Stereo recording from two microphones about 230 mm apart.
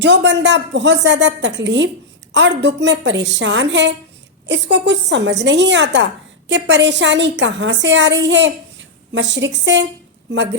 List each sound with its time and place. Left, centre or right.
0.0 s a woman's voice: right